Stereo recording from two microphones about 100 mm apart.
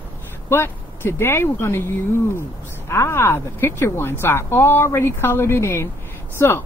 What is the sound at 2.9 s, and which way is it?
Speech, 30° left (ahead or behind).